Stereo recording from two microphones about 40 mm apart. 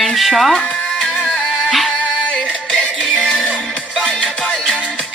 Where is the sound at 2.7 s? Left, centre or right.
Left.